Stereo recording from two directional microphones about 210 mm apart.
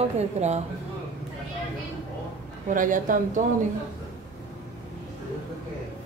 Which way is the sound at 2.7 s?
40° right (ahead or behind).